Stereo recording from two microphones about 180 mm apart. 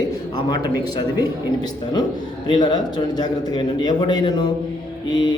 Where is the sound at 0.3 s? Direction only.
25° left (ahead or behind).